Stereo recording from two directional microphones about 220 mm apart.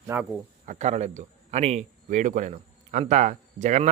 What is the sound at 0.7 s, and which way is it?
A man's voice, 30° right (ahead or behind).